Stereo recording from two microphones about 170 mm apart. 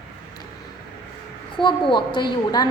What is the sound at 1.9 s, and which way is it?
Speech, 25° left (ahead or behind).